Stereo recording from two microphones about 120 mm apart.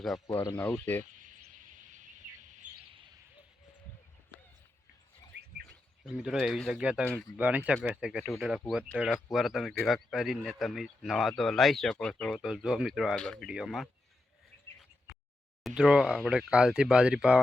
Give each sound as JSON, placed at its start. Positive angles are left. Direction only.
{"t": 0.5, "sound": "speech", "side_deg": 15}
{"t": 1.9, "sound": "bird", "side_deg": -90}
{"t": 6.1, "sound": "speech", "side_deg": -5}
{"t": 7.0, "sound": "speech", "side_deg": 10}
{"t": 7.3, "sound": "speech", "side_deg": -15}
{"t": 12.4, "sound": "speech", "side_deg": -5}
{"t": 15.6, "sound": "speech", "side_deg": -5}